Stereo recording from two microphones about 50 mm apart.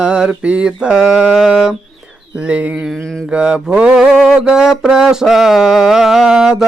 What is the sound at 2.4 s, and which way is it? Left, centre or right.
Mantra, right.